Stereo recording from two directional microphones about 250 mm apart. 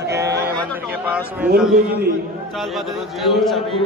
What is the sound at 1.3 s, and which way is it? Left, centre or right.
Speech, centre.